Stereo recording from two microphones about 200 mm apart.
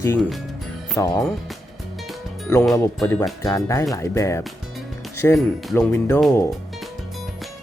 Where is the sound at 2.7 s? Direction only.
15° left (ahead or behind).